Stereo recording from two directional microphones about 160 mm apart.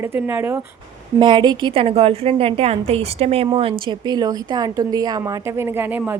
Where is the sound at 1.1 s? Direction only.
30° right (ahead or behind).